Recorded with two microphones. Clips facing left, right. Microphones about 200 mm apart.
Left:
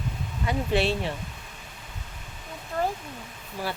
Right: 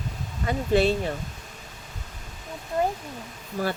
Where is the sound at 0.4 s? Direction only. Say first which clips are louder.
Right 3 dB; 45° right (ahead or behind).